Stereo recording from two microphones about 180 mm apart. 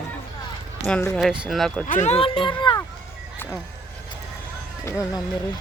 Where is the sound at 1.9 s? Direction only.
40° left (ahead or behind).